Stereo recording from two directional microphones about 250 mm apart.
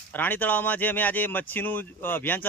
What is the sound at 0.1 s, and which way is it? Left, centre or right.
Speech, centre.